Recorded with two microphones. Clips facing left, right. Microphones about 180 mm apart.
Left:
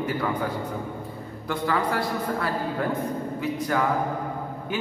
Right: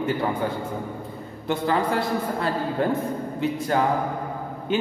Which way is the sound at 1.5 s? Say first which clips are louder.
Right 3 dB; 25° right (ahead or behind).